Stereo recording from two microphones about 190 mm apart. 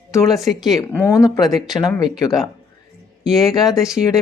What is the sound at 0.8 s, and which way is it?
Speech, 15° left (ahead or behind).